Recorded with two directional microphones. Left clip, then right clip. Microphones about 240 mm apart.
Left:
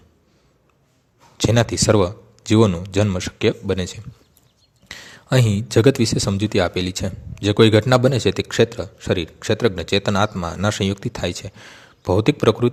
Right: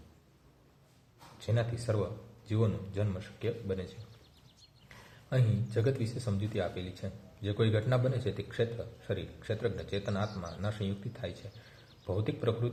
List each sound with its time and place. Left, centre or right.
1.5 s speech: left
4.9 s speech: left